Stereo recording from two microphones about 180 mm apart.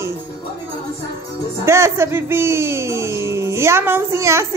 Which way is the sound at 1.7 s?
15° right (ahead or behind).